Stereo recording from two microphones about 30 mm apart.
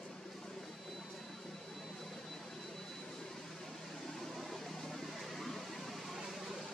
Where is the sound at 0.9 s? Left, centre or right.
Centre.